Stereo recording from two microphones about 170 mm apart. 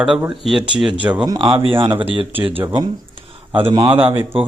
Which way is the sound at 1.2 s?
25° right (ahead or behind).